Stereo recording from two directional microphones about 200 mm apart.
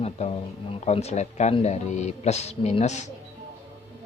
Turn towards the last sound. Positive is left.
turn(degrees=35)  # may be behind; listen again after turning